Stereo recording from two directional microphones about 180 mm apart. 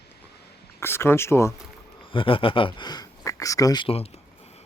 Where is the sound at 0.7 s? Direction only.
15° left (ahead or behind).